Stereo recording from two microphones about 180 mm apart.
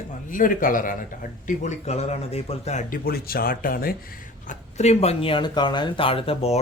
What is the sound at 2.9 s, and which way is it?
Speech, 55° left (ahead or behind).